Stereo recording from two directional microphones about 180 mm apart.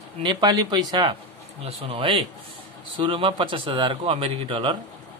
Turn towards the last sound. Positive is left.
turn(degrees=-30)  # may be behind; listen again after turning